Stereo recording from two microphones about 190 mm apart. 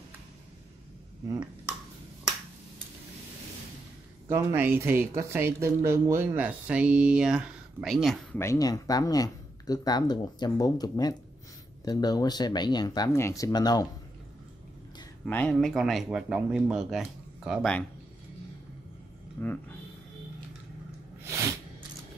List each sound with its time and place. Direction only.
4.3 s speech: 10° right (ahead or behind)
8.4 s speech: 15° left (ahead or behind)
15.2 s speech: 5° left (ahead or behind)
19.4 s speech: 10° left (ahead or behind)
21.2 s a sound: 15° right (ahead or behind)